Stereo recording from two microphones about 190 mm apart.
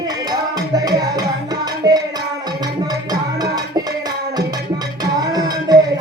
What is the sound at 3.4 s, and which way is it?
Music, 20° right (ahead or behind).